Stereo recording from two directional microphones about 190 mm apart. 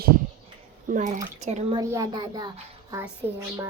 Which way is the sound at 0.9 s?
40° right (ahead or behind).